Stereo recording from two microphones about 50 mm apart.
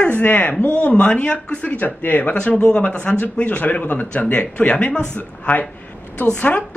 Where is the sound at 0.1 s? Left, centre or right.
Left.